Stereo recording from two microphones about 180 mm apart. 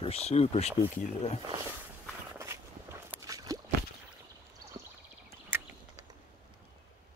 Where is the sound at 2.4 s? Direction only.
15° right (ahead or behind).